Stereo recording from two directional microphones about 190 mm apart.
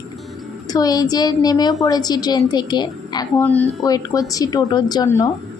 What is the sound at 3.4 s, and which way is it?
A woman's voice, 10° left (ahead or behind).